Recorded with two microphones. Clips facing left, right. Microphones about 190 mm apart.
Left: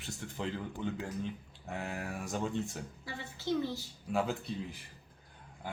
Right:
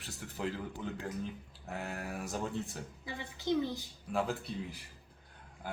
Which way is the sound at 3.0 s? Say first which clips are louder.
Right 2 dB; 15° right (ahead or behind).